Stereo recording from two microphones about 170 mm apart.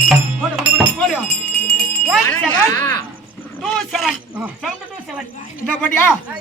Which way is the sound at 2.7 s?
20° left (ahead or behind).